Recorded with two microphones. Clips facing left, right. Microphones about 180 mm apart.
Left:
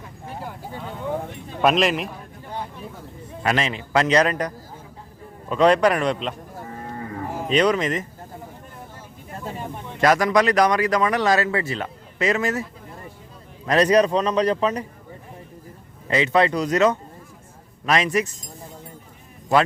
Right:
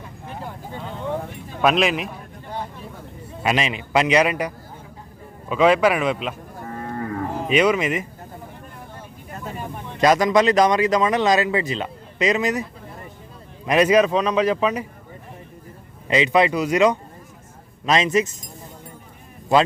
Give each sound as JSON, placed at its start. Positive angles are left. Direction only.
{"t": 1.6, "sound": "a man's voice", "side_deg": 0}
{"t": 3.4, "sound": "a man's voice", "side_deg": -15}
{"t": 6.7, "sound": "moo", "side_deg": -60}
{"t": 7.4, "sound": "speech", "side_deg": -10}
{"t": 10.0, "sound": "speech", "side_deg": -20}
{"t": 13.7, "sound": "speech", "side_deg": -10}
{"t": 16.0, "sound": "speech", "side_deg": -15}